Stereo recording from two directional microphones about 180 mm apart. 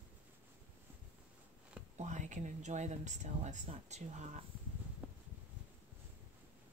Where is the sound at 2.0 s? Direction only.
40° right (ahead or behind).